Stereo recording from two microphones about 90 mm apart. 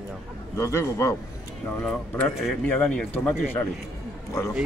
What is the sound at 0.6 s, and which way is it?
Speech, 35° left (ahead or behind).